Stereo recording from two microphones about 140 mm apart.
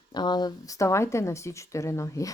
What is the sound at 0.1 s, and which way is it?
Speech, 30° left (ahead or behind).